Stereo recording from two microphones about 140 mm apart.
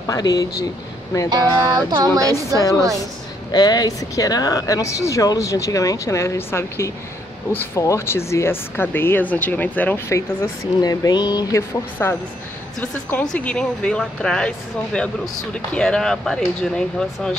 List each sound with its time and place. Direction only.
0.0 s speech: 25° left (ahead or behind)
1.3 s a sound: 30° right (ahead or behind)
3.5 s speech: 30° left (ahead or behind)
12.0 s speech: 20° left (ahead or behind)